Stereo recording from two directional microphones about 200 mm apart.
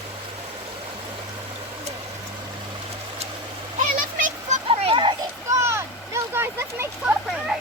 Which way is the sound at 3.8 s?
40° right (ahead or behind).